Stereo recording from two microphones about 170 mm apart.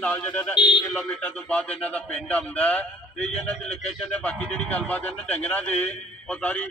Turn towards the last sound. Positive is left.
turn(degrees=10)  # may be behind; listen again after turning